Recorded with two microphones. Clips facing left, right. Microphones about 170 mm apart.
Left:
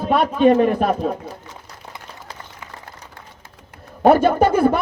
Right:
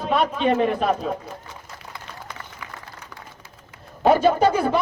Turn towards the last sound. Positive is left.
turn(degrees=55)  # may be behind; listen again after turning